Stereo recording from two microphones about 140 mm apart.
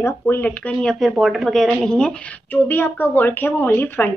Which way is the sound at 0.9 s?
Centre (ahead or behind).